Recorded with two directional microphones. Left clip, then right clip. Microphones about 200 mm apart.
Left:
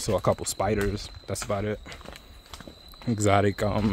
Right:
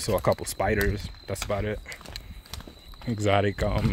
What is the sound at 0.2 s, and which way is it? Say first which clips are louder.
Speech: even; 5° left (ahead or behind).